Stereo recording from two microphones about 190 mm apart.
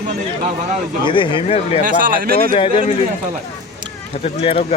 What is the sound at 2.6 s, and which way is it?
Speech, 30° left (ahead or behind).